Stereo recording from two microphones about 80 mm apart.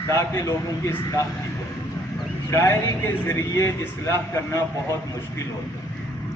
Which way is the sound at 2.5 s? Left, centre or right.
Left.